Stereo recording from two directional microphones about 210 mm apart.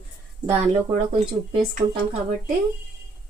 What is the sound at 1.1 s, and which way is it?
Speech, 35° right (ahead or behind).